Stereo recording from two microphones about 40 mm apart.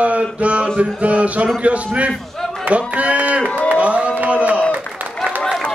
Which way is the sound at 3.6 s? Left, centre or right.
Right.